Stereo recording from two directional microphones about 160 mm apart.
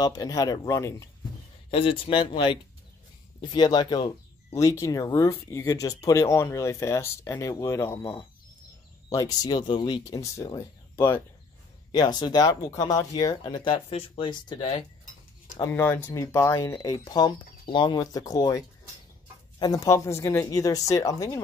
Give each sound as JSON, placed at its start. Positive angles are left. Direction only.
{"t": 0.0, "sound": "speech", "side_deg": 25}
{"t": 1.7, "sound": "speech", "side_deg": 35}
{"t": 11.9, "sound": "speech", "side_deg": 25}
{"t": 15.6, "sound": "speech", "side_deg": 15}
{"t": 19.6, "sound": "speech", "side_deg": 20}